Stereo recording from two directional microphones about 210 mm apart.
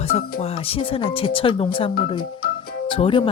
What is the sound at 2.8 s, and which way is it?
Speech, 25° left (ahead or behind).